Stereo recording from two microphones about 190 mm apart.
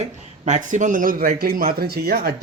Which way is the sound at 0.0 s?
40° right (ahead or behind).